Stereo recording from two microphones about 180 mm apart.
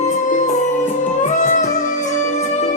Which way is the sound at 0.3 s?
45° left (ahead or behind).